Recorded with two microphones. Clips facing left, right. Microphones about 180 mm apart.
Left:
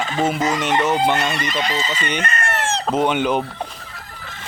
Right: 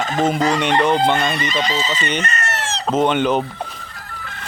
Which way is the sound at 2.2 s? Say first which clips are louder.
Left 1 dB; 50° left (ahead or behind).